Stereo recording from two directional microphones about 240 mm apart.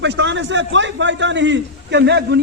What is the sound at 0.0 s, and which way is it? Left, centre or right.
A man's voice, right.